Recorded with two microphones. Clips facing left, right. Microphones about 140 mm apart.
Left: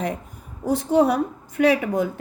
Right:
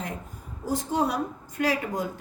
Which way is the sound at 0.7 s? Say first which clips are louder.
Left 8 dB; 65° left (ahead or behind).